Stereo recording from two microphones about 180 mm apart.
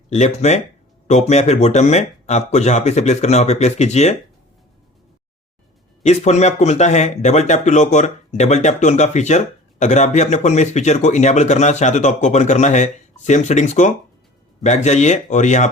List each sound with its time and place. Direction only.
0.1 s speech: 40° left (ahead or behind)
6.0 s speech: 40° left (ahead or behind)